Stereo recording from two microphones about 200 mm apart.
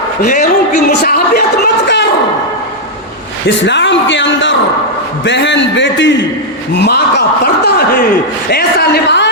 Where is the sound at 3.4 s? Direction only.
60° left (ahead or behind).